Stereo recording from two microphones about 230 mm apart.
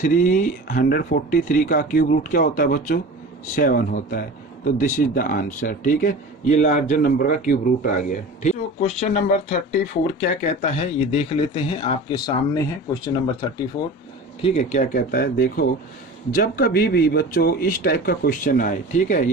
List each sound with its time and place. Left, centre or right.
0.0 s speech: left; by 13.8 s centre
14.4 s speech: left